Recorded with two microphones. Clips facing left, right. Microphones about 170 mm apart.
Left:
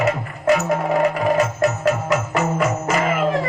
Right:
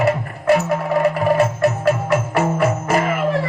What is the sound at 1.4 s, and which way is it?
Music, 55° right (ahead or behind).